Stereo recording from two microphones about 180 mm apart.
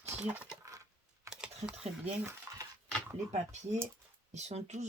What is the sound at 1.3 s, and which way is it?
Computer keyboard, 15° right (ahead or behind).